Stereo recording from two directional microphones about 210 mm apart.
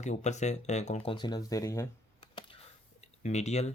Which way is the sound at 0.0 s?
35° left (ahead or behind).